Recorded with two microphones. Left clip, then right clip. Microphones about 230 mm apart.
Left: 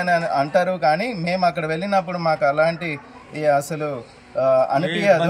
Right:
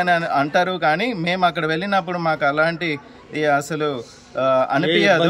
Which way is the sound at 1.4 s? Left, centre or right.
Right.